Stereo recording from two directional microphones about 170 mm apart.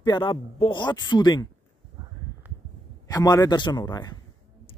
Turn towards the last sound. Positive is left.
turn(degrees=25)  # may be behind; listen again after turning